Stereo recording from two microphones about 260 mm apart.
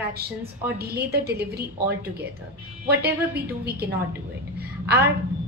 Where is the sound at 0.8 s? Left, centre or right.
Right.